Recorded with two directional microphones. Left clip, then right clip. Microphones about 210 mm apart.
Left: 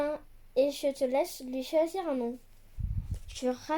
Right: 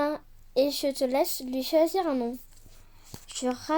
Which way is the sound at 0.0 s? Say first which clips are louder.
Right 4 dB; 35° right (ahead or behind).